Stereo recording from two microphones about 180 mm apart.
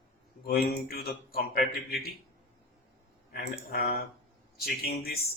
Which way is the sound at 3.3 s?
55° left (ahead or behind).